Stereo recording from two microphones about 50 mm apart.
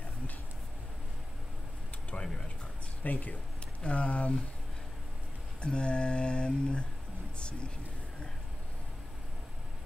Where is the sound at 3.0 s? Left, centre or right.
Left.